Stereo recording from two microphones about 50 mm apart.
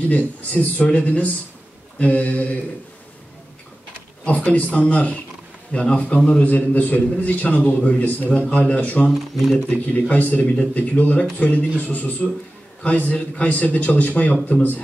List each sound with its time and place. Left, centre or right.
0.1 s speech: left
4.5 s a man's voice: left